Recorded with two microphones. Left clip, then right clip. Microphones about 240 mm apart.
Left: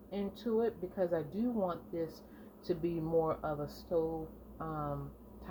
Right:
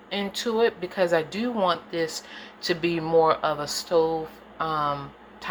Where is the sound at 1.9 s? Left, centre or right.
Centre.